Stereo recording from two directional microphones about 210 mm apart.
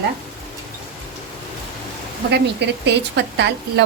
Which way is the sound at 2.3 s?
55° right (ahead or behind).